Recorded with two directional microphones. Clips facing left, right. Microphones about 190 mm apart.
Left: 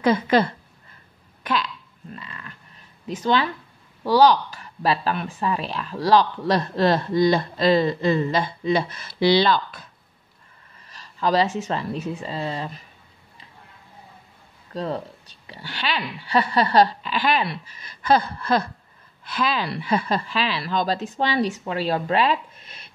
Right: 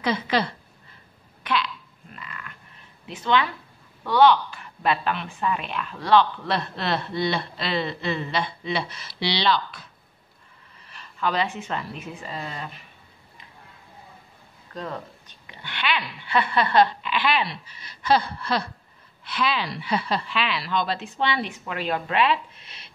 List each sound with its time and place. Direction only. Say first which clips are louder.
0.0 s a woman's voice: left 6 dB; 45° left (ahead or behind)
1.4 s a sound: left 1 dB; 45° left (ahead or behind)
2.1 s pig: right 1 dB; 30° left (ahead or behind)
3.1 s speech: left 2 dB; 40° left (ahead or behind)
10.9 s speech: left 5 dB; 35° left (ahead or behind)
14.7 s a woman's voice: left 6 dB; 35° left (ahead or behind)